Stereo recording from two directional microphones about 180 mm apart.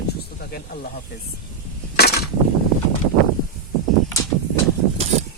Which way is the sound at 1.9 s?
60° left (ahead or behind).